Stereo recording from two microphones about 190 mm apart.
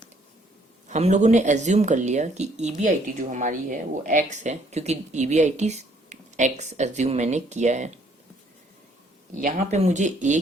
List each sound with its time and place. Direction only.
0.9 s speech: 35° right (ahead or behind)
9.3 s speech: 45° right (ahead or behind)